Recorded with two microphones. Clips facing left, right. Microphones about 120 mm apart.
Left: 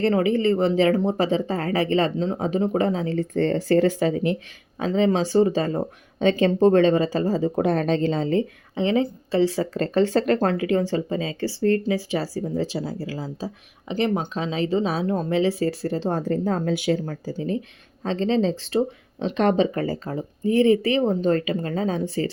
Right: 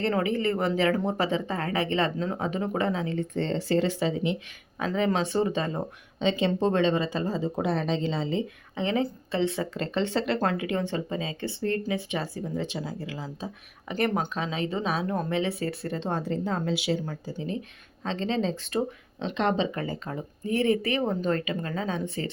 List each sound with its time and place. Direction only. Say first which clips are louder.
0.3 s speech: left 6 dB; 30° left (ahead or behind); by 4.4 s 45° left (ahead or behind)
4.8 s speech: left 5 dB; 30° left (ahead or behind); by 8.4 s 45° left (ahead or behind)
8.7 s a woman's voice: left 5 dB; 30° left (ahead or behind)
19.2 s speech: left 6 dB; 40° left (ahead or behind)